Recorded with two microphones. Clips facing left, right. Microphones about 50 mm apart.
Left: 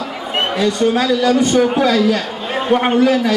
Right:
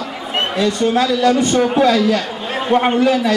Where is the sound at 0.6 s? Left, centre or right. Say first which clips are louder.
Even; centre.